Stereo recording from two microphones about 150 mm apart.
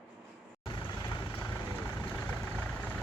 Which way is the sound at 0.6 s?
30° left (ahead or behind).